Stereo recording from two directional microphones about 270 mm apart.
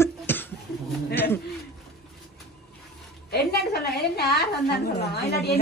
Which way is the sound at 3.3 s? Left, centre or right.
Left.